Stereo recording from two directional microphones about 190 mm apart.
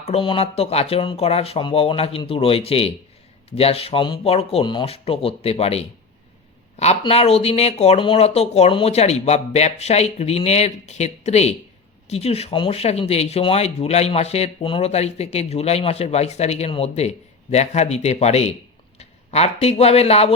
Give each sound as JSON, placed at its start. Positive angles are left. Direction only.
{"t": 0.0, "sound": "speech", "side_deg": 30}